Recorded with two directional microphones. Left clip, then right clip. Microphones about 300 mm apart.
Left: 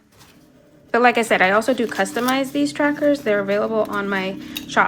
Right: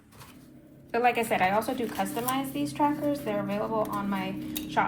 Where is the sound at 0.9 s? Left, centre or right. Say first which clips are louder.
Left 9 dB; centre.